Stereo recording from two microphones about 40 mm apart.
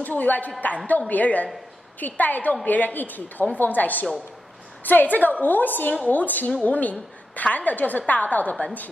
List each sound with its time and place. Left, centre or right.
0.0 s a woman's voice: left